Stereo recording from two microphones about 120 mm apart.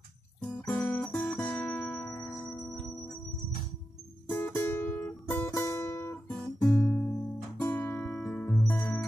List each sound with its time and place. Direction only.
0.4 s music: 5° left (ahead or behind)
0.8 s guitar: 5° left (ahead or behind)
2.0 s music: 20° left (ahead or behind)
4.3 s music: 15° left (ahead or behind)
5.5 s guitar: 25° left (ahead or behind)
7.7 s music: 15° left (ahead or behind)